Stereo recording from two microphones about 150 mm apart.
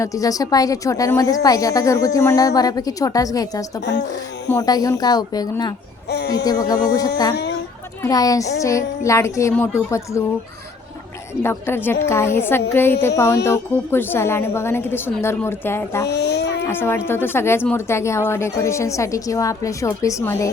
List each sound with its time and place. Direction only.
0.0 s a woman's voice: 20° left (ahead or behind)
6.1 s speech: 90° left
6.4 s a woman's voice: 25° left (ahead or behind)
11.4 s a woman's voice: 15° left (ahead or behind)
16.0 s a sound: 90° left
16.6 s a woman's voice: 15° left (ahead or behind)